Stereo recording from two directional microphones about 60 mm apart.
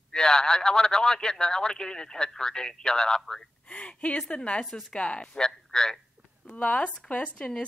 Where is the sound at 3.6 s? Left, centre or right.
Left.